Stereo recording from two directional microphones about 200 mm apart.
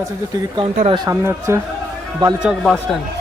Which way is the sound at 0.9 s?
20° right (ahead or behind).